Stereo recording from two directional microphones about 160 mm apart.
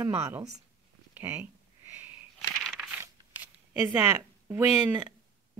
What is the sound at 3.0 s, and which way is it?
Shuffling cards, 10° right (ahead or behind).